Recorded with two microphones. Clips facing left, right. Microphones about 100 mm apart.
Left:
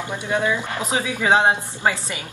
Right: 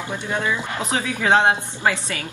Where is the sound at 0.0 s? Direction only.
20° left (ahead or behind).